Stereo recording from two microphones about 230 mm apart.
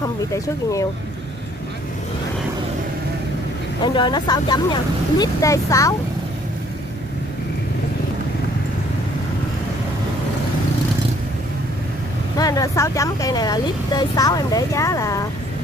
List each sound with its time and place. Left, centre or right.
0.3 s speech: centre
3.8 s speech: centre
12.4 s speech: centre